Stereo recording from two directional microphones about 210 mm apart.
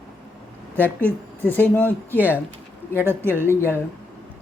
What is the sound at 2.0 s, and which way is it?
Speech, 10° right (ahead or behind).